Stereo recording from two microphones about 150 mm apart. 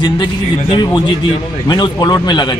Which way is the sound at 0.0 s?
30° left (ahead or behind).